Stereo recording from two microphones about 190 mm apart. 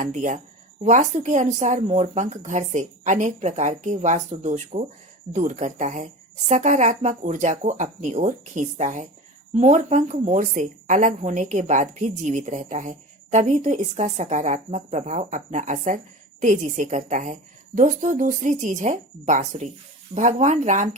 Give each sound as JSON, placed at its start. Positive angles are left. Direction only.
{"t": 0.0, "sound": "a woman's voice", "side_deg": -40}